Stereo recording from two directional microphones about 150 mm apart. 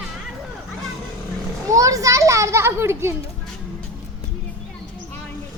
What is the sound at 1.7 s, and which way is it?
A child's voice, 20° right (ahead or behind).